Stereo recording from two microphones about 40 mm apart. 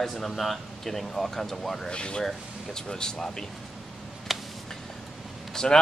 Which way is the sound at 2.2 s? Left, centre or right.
Centre.